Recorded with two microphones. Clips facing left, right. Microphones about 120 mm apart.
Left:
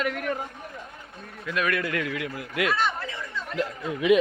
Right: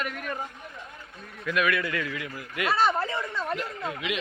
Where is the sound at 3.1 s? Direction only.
45° right (ahead or behind).